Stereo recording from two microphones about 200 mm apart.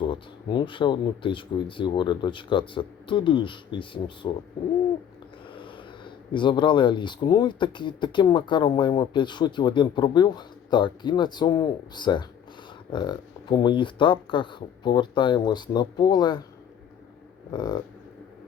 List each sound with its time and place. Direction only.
0.1 s speech: 25° left (ahead or behind)
5.5 s speech: 25° left (ahead or behind)
17.5 s speech: 20° left (ahead or behind)